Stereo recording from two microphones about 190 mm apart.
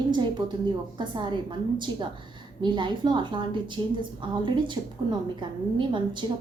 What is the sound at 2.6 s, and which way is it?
A woman's voice, 25° right (ahead or behind).